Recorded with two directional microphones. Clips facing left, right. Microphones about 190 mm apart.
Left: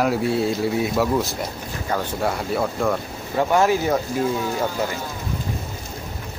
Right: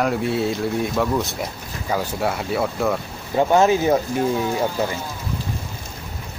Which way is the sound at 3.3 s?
20° right (ahead or behind).